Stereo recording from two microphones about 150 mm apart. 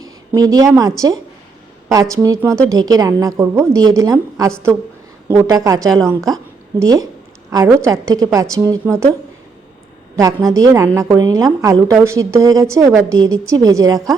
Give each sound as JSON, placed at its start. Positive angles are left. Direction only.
{"t": 0.0, "sound": "a sound", "side_deg": -25}
{"t": 0.8, "sound": "a woman's voice", "side_deg": -25}
{"t": 10.2, "sound": "a woman's voice", "side_deg": -25}